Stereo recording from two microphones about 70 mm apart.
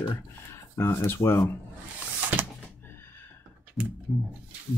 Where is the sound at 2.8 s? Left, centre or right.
Left.